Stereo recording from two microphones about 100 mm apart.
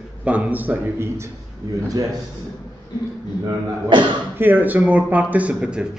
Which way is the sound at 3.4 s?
50° right (ahead or behind).